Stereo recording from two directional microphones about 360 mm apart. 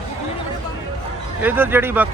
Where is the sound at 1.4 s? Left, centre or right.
Centre.